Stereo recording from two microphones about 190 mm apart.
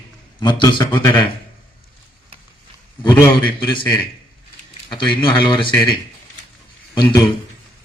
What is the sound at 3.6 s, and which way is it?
Speech, 25° left (ahead or behind).